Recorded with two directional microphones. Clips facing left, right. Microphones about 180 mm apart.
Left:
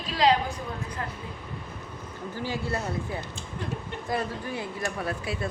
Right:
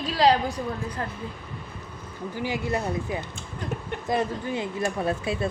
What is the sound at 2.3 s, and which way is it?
Speech, 15° right (ahead or behind).